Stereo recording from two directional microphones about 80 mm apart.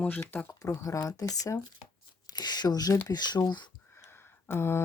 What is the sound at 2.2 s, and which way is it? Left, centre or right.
Speech, left.